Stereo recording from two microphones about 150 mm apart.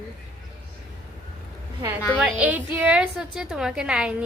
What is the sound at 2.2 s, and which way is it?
A woman's voice, 10° right (ahead or behind).